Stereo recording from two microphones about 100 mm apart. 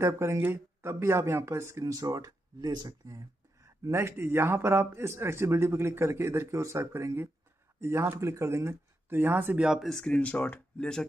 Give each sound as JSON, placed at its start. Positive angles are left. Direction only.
{"t": 0.0, "sound": "speech", "side_deg": -30}
{"t": 3.1, "sound": "speech", "side_deg": -30}
{"t": 9.7, "sound": "speech", "side_deg": 0}